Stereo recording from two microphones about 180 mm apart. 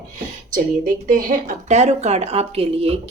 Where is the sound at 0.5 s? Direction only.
50° right (ahead or behind); by 2.9 s 35° right (ahead or behind).